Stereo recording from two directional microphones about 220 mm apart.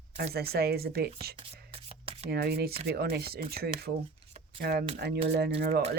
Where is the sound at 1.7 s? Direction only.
25° right (ahead or behind).